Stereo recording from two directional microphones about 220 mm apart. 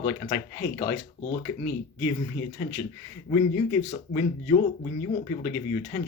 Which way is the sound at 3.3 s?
20° left (ahead or behind).